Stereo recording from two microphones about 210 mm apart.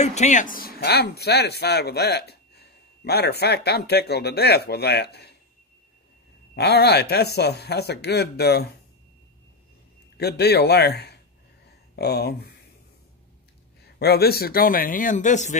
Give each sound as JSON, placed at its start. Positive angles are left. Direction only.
{"t": 0.0, "sound": "speech", "side_deg": 35}
{"t": 6.5, "sound": "speech", "side_deg": 50}
{"t": 10.1, "sound": "speech", "side_deg": 50}
{"t": 13.9, "sound": "speech", "side_deg": 50}